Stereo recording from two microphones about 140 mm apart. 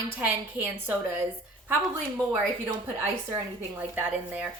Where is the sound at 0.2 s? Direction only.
15° right (ahead or behind).